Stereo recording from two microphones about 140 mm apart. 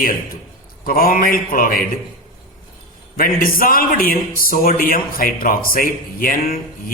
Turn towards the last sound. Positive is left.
turn(degrees=90)